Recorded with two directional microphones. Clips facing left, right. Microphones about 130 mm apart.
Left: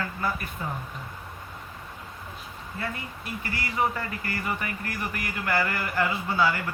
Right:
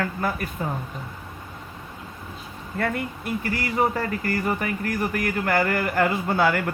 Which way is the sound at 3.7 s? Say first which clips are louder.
Right 4 dB; 40° right (ahead or behind).